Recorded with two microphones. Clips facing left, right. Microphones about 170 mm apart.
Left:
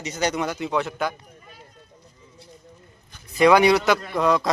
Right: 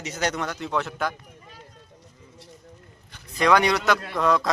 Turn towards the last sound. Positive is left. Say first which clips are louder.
# left 2 dB
turn(degrees=0)  # may be behind; listen again after turning